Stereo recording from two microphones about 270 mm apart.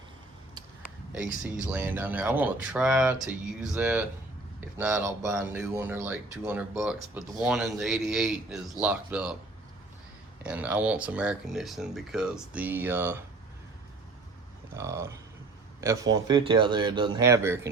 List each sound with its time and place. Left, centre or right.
1.6 s speech: centre
10.4 s speech: centre
14.8 s speech: centre